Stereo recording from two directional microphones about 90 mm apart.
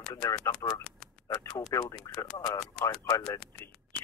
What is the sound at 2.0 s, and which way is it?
Speech, centre (ahead or behind).